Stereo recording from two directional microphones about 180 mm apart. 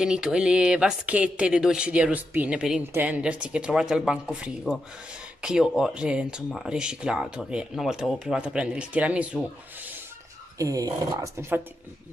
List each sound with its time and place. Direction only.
0.0 s speech: 5° right (ahead or behind)
10.6 s speech: 20° right (ahead or behind)